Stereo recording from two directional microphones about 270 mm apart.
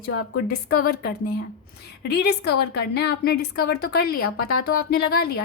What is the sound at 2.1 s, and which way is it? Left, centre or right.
A woman's voice, left.